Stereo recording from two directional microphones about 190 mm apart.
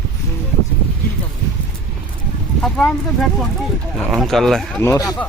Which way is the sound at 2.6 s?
5° left (ahead or behind).